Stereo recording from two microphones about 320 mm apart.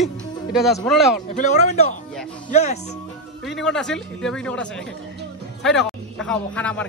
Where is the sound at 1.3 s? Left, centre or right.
Left.